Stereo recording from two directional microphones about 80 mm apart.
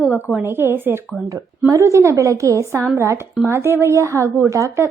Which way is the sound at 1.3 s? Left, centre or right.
Right.